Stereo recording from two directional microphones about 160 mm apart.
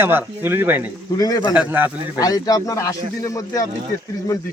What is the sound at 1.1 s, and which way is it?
Speech, 25° left (ahead or behind).